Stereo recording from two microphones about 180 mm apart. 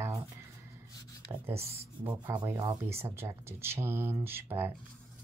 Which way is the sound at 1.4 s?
15° right (ahead or behind).